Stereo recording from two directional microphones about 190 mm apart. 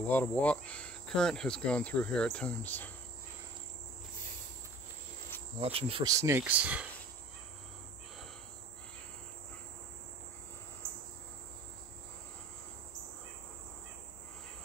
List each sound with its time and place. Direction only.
0.0 s speech: 10° left (ahead or behind)
5.6 s insect: 30° right (ahead or behind)
6.0 s speech: 15° right (ahead or behind)